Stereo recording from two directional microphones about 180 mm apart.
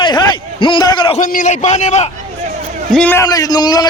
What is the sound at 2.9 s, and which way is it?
Speech, 10° left (ahead or behind).